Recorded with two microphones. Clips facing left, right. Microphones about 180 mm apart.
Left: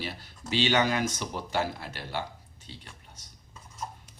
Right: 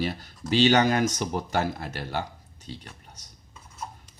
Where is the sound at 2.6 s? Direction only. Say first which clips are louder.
Right 8 dB; 40° right (ahead or behind).